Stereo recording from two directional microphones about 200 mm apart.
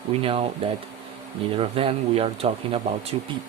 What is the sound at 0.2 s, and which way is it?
Speech, 30° right (ahead or behind).